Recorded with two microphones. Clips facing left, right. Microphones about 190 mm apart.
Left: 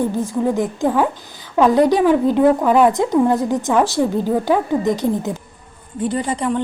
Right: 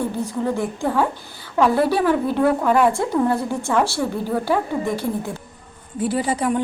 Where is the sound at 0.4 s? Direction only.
15° left (ahead or behind).